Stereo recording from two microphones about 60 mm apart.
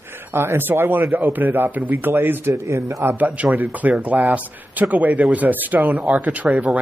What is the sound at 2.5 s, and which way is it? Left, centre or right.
Speech, right.